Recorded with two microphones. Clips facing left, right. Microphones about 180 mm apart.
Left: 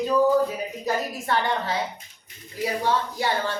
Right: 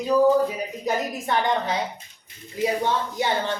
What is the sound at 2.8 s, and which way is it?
Speech, 20° right (ahead or behind).